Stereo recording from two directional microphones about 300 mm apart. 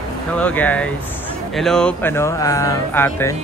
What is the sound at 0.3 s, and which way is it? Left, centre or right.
Speech, centre.